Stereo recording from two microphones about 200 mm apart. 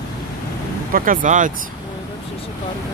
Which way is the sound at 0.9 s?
45° right (ahead or behind).